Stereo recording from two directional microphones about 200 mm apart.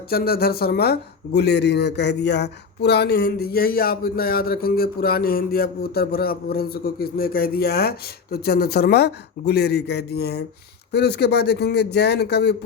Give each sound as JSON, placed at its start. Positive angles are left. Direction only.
{"t": 0.1, "sound": "a man's voice", "side_deg": 50}